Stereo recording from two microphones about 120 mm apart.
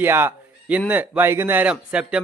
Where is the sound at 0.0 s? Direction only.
20° right (ahead or behind).